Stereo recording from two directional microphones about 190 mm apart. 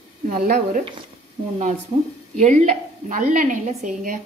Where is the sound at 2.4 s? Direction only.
40° right (ahead or behind).